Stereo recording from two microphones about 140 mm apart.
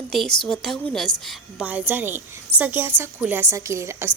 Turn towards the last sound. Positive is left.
turn(degrees=-20)  # may be behind; listen again after turning